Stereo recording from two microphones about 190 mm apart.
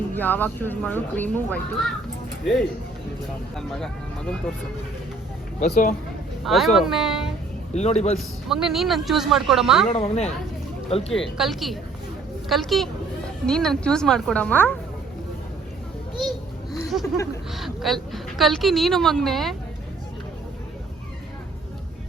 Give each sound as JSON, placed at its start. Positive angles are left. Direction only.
{"t": 0.1, "sound": "speech", "side_deg": 10}
{"t": 5.5, "sound": "a man's voice", "side_deg": 40}
{"t": 6.4, "sound": "a woman's voice", "side_deg": 0}
{"t": 7.7, "sound": "a man's voice", "side_deg": 35}
{"t": 8.4, "sound": "a woman's voice", "side_deg": 0}
{"t": 9.9, "sound": "a man's voice", "side_deg": 30}
{"t": 11.3, "sound": "a woman's voice", "side_deg": 0}
{"t": 17.6, "sound": "a woman's voice", "side_deg": 0}